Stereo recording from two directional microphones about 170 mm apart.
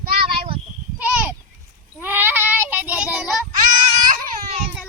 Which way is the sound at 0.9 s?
10° right (ahead or behind).